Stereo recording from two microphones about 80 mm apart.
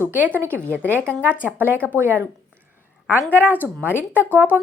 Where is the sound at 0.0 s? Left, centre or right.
Right.